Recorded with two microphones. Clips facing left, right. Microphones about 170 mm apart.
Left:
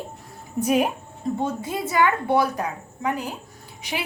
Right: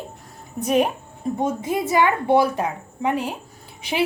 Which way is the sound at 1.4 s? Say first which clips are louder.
Right 6 dB; 20° right (ahead or behind).